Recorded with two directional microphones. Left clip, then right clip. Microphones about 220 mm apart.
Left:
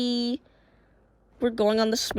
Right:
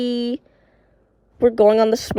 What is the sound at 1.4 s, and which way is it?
Speech, 45° right (ahead or behind).